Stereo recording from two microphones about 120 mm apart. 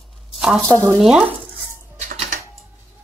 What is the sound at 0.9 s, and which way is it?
Speech, 5° right (ahead or behind).